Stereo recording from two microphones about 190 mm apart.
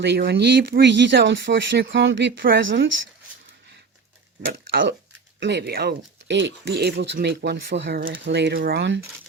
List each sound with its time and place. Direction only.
0.0 s speech: 60° right (ahead or behind); by 2.9 s 80° right
4.4 s speech: 60° right (ahead or behind)
8.2 s speech: 65° right (ahead or behind)